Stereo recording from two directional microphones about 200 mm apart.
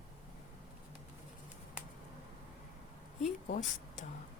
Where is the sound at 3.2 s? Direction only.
40° left (ahead or behind).